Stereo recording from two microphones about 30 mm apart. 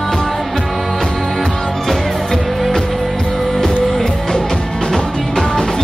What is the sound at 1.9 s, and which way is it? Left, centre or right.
Music, centre.